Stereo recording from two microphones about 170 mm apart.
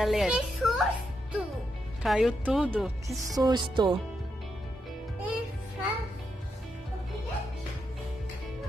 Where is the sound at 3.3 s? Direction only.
25° right (ahead or behind).